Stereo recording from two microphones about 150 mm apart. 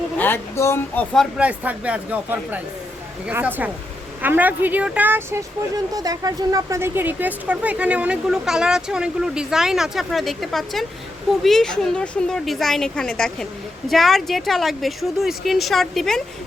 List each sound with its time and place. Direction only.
0.2 s speech: 15° left (ahead or behind)
1.4 s speech: 10° right (ahead or behind)